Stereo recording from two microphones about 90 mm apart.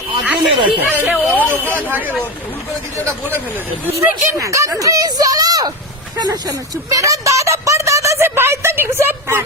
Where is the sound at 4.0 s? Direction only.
20° right (ahead or behind).